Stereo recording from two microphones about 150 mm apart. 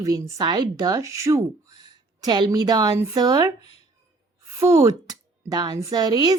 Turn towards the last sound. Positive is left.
turn(degrees=-25)  # may be behind; listen again after turning